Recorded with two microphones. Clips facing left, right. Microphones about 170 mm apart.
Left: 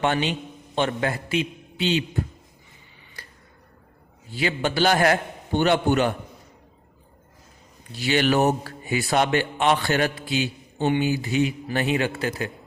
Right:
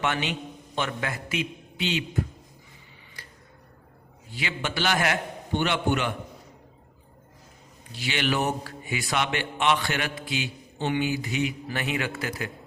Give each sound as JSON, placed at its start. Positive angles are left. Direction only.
{"t": 0.0, "sound": "speech", "side_deg": 35}
{"t": 4.4, "sound": "speech", "side_deg": 35}
{"t": 7.9, "sound": "speech", "side_deg": 40}